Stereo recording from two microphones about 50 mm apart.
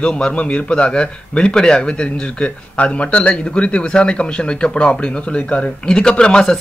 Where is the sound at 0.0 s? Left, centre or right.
Left.